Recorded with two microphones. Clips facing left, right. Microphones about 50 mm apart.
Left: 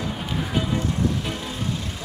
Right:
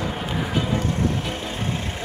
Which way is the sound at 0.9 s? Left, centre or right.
Right.